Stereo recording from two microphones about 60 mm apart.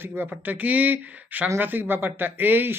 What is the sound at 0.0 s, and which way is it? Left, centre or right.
Speech, right.